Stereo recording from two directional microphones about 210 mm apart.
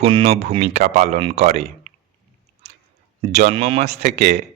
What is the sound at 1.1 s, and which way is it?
Speech, 30° right (ahead or behind).